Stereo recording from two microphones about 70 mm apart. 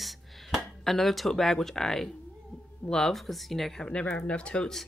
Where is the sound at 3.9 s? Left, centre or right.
Centre.